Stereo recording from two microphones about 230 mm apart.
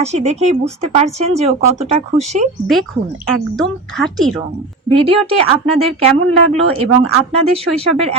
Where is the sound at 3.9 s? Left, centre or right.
Centre.